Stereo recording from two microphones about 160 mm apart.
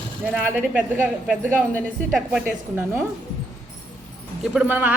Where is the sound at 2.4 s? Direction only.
15° right (ahead or behind).